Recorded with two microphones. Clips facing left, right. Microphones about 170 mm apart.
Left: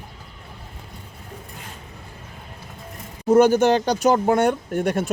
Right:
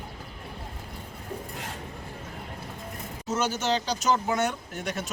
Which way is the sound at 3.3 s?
55° left (ahead or behind).